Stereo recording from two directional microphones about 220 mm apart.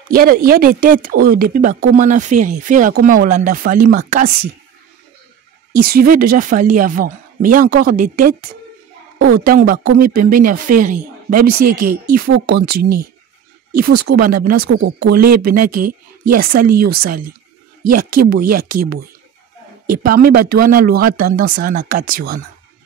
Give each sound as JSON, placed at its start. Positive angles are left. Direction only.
{"t": 0.1, "sound": "speech", "side_deg": -40}
{"t": 5.8, "sound": "speech", "side_deg": -45}